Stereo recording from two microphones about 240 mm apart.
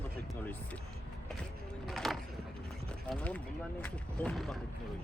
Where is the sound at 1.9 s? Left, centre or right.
Centre.